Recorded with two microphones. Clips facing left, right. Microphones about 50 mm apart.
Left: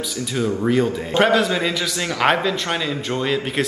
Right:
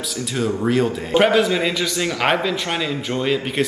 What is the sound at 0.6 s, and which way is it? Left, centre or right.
A man's voice, centre.